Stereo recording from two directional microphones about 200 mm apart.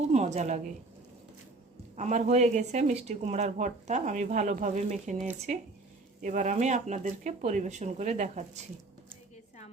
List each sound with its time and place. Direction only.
0.1 s a woman's voice: 35° right (ahead or behind)
2.0 s speech: 35° right (ahead or behind)
6.2 s speech: 40° right (ahead or behind)